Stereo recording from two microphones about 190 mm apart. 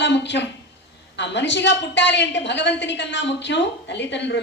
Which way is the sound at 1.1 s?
65° left (ahead or behind).